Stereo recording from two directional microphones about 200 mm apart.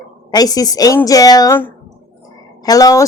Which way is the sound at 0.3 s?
20° left (ahead or behind).